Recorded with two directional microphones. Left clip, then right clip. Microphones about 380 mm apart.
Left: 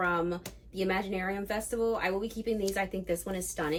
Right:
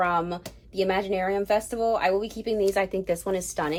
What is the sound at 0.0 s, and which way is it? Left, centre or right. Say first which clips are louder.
Speech: right 5 dB; centre.